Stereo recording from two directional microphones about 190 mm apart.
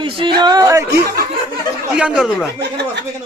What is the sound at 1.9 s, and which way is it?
Speech, 5° right (ahead or behind).